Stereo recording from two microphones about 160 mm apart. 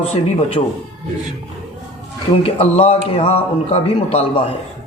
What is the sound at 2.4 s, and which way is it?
A man's voice, 40° left (ahead or behind).